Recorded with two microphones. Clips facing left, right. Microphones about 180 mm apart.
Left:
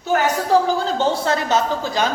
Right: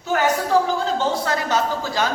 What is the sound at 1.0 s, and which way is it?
A woman's voice, 25° left (ahead or behind).